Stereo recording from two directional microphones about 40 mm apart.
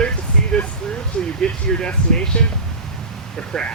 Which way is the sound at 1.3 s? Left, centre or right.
Centre.